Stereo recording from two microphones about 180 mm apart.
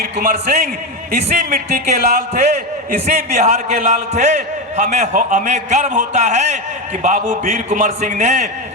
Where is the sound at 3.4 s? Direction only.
40° right (ahead or behind).